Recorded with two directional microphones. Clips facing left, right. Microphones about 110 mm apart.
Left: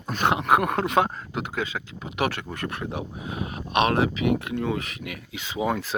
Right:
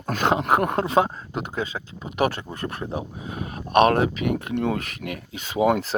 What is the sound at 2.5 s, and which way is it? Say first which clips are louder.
Speech: right 1 dB; 40° right (ahead or behind).